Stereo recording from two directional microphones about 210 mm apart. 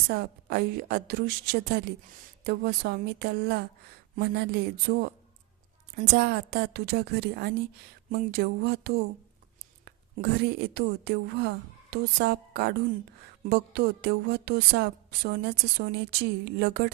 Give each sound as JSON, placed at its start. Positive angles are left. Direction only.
{"t": 0.1, "sound": "a woman's voice", "side_deg": -50}
{"t": 6.1, "sound": "a woman's voice", "side_deg": -50}